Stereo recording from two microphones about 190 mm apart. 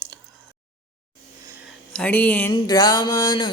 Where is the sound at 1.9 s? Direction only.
10° left (ahead or behind).